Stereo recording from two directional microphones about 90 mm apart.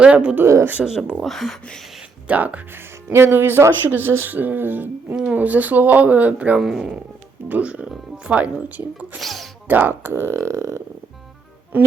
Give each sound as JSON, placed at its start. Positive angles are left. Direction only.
{"t": 0.0, "sound": "speech", "side_deg": -10}
{"t": 0.4, "sound": "speech", "side_deg": -30}
{"t": 0.7, "sound": "speech", "side_deg": -10}
{"t": 1.2, "sound": "speech", "side_deg": 0}
{"t": 2.2, "sound": "speech", "side_deg": -15}
{"t": 3.1, "sound": "speech", "side_deg": -30}
{"t": 6.6, "sound": "speech", "side_deg": -5}
{"t": 9.1, "sound": "speech", "side_deg": 0}
{"t": 9.6, "sound": "speech", "side_deg": -20}